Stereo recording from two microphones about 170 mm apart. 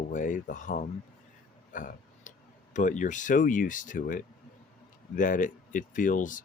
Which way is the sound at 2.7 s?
45° left (ahead or behind).